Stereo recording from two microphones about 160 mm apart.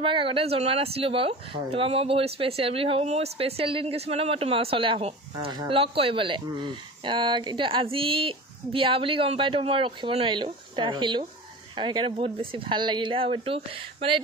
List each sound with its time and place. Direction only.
0.0 s speech: 35° right (ahead or behind)